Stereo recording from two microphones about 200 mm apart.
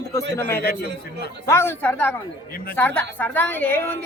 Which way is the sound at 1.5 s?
10° left (ahead or behind).